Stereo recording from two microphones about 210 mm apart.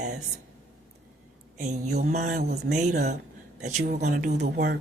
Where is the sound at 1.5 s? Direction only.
35° right (ahead or behind).